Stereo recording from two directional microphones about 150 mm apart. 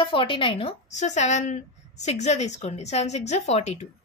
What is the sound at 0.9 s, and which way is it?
Speech, 50° left (ahead or behind).